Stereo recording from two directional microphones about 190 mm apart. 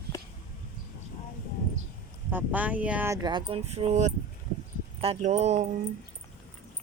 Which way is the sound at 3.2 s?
25° right (ahead or behind).